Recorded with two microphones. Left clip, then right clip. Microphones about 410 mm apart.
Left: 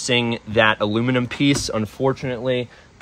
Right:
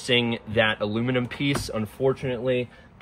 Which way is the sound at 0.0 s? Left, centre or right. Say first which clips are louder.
Left 3 dB; centre.